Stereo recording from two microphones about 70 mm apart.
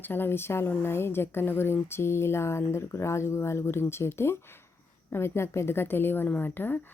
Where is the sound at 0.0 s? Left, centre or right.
Left.